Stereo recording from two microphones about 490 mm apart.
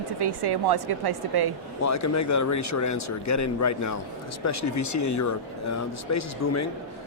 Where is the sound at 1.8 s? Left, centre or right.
Left.